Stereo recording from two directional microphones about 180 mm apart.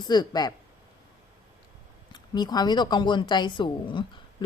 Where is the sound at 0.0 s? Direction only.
25° left (ahead or behind).